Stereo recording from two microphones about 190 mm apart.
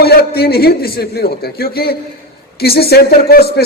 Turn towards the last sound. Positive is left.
turn(degrees=55)  # may be behind; listen again after turning